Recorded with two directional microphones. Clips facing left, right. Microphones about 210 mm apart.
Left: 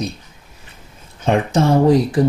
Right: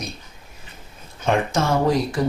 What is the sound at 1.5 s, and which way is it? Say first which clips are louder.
Speech: left 10 dB; 35° left (ahead or behind).